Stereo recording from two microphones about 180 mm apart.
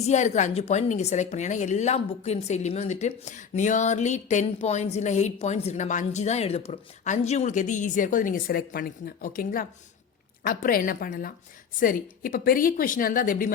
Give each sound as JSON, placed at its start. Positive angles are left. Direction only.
{"t": 0.0, "sound": "a woman's voice", "side_deg": 40}